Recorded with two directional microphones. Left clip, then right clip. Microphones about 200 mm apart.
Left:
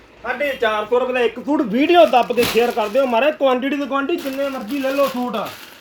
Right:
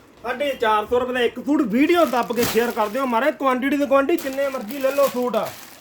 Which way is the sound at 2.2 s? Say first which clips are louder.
Left 4 dB; 30° right (ahead or behind).